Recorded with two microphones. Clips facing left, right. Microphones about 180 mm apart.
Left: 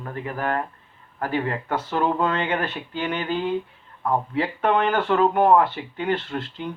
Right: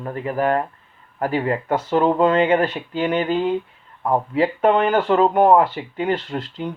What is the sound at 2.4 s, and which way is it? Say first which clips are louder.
Speech: right 8 dB; 45° right (ahead or behind).